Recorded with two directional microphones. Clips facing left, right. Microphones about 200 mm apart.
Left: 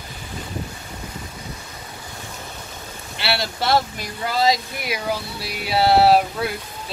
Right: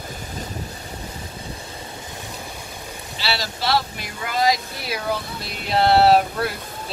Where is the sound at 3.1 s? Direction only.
60° left (ahead or behind).